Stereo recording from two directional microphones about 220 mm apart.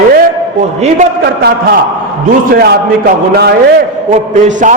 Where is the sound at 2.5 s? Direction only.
45° right (ahead or behind).